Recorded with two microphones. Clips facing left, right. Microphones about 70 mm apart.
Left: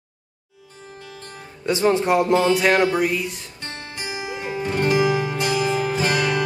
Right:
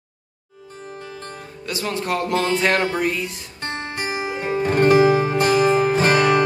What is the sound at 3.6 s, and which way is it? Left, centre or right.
Music, right.